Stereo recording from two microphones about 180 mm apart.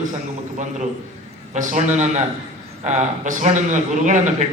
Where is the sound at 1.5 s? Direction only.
40° right (ahead or behind).